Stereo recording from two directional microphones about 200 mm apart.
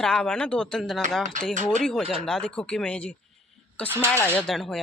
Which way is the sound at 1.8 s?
Centre (ahead or behind).